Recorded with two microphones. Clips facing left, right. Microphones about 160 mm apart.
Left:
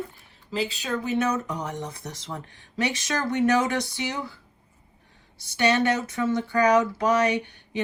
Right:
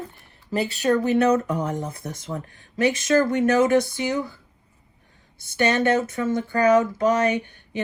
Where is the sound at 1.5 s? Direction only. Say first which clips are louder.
Right 5 dB; 50° right (ahead or behind).